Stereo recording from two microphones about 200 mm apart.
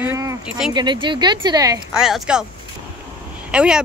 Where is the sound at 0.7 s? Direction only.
25° right (ahead or behind).